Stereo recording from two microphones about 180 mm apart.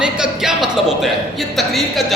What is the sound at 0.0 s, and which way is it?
Speech, 5° right (ahead or behind).